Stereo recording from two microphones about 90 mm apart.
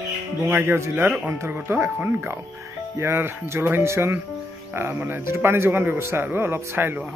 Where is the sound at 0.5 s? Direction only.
25° right (ahead or behind).